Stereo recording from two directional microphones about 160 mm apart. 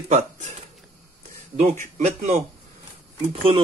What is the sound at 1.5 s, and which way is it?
Speech, 50° right (ahead or behind).